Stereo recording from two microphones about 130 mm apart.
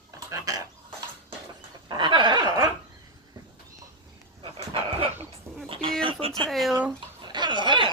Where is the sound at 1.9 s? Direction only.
35° right (ahead or behind).